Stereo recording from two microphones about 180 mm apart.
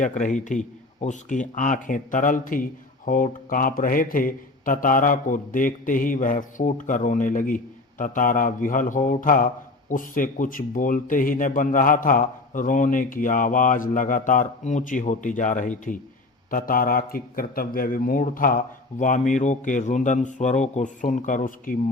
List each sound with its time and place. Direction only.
0.0 s speech: 45° left (ahead or behind)